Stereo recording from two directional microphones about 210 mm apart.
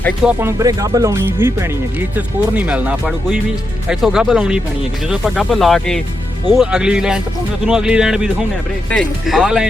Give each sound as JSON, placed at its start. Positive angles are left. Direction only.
{"t": 0.3, "sound": "speech", "side_deg": -10}